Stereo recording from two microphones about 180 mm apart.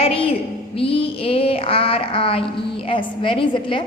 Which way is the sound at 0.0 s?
30° left (ahead or behind).